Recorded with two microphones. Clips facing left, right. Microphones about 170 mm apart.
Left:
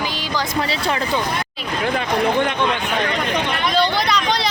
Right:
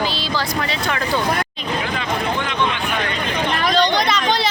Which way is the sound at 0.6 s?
30° left (ahead or behind).